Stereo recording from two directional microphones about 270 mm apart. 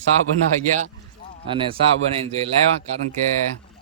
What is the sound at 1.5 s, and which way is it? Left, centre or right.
Speech, centre.